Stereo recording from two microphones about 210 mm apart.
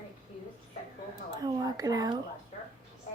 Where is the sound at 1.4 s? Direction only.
15° right (ahead or behind).